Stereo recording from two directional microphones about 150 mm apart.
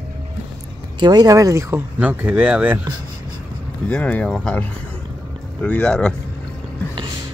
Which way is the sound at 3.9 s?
5° left (ahead or behind).